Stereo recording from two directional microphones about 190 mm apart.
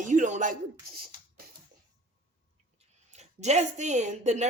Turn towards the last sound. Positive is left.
turn(degrees=-35)  # may be behind; listen again after turning